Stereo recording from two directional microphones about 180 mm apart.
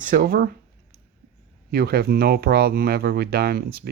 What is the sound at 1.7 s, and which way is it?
Speech, 60° right (ahead or behind).